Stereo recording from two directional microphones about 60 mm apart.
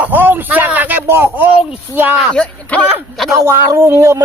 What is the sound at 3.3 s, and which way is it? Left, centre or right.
Speech, right.